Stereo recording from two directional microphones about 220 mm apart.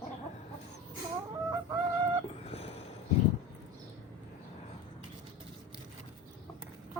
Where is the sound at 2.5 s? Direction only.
30° left (ahead or behind).